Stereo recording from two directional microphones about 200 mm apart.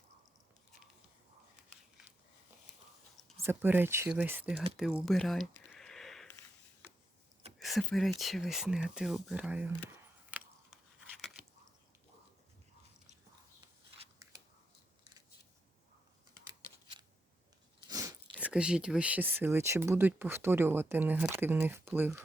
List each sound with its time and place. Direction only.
3.4 s speech: 10° right (ahead or behind)
4.8 s a sound: 5° right (ahead or behind)
7.6 s speech: centre (ahead or behind)
10.3 s a sound: 5° right (ahead or behind)
17.8 s biting: 20° right (ahead or behind)
18.3 s speech: 5° right (ahead or behind)